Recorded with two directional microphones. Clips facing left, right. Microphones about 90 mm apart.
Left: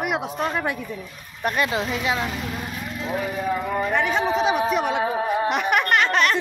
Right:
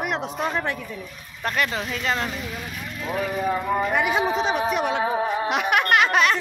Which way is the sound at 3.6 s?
5° right (ahead or behind).